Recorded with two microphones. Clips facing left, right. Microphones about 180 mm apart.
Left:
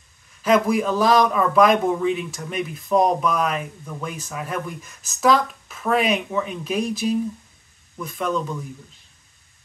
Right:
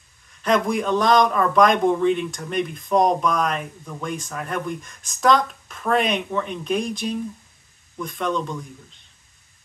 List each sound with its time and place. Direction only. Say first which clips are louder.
0.4 s speech: left 2 dB; 5° left (ahead or behind)